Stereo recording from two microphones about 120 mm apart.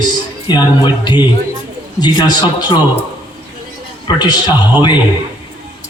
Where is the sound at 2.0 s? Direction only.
35° left (ahead or behind).